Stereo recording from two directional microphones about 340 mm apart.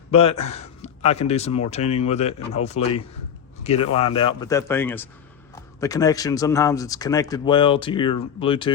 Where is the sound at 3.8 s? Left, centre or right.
Left.